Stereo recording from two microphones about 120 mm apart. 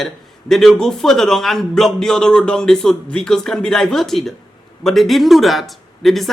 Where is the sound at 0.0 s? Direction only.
Centre (ahead or behind).